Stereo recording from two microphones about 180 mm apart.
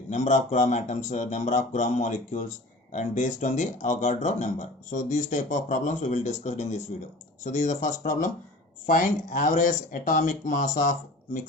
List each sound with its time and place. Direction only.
0.1 s speech: 40° left (ahead or behind)